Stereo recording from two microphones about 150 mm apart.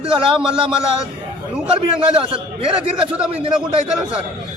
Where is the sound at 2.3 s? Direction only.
40° right (ahead or behind).